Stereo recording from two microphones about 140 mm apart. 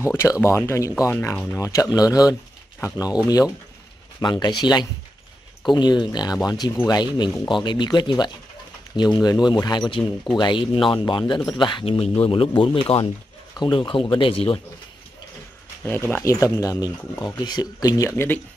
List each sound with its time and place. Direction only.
0.0 s speech: 20° left (ahead or behind)
4.2 s speech: 30° left (ahead or behind)
15.8 s speech: 15° left (ahead or behind)